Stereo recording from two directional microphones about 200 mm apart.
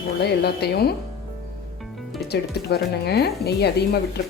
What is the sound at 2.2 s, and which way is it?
Speech, 55° left (ahead or behind).